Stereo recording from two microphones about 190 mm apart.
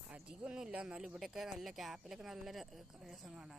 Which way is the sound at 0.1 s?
5° right (ahead or behind).